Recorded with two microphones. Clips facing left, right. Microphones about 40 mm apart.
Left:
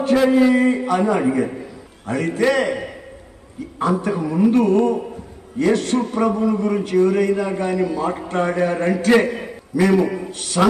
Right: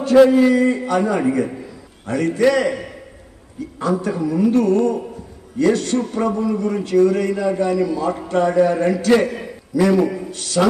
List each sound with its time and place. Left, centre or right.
0.1 s speech: centre
0.6 s a man's voice: left